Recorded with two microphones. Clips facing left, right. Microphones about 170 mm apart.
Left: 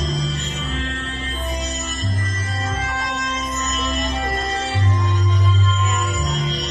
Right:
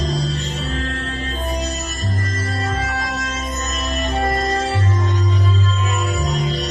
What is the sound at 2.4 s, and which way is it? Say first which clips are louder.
Music: right 4 dB; 40° right (ahead or behind).